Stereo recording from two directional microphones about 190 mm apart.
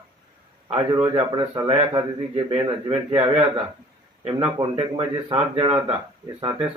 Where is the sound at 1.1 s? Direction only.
25° right (ahead or behind).